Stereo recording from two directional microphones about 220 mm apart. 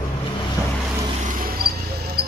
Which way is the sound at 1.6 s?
45° right (ahead or behind).